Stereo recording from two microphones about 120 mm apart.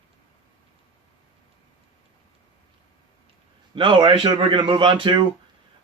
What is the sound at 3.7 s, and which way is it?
A man's voice, 45° right (ahead or behind).